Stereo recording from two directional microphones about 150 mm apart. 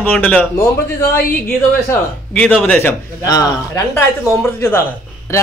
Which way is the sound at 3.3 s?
25° left (ahead or behind).